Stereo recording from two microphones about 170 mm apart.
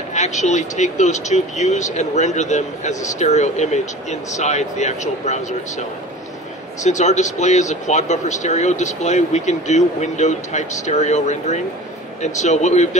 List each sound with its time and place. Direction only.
0.1 s speech: 45° left (ahead or behind)